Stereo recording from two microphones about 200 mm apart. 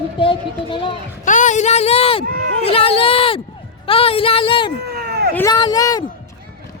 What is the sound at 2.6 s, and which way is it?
Speech, 30° left (ahead or behind).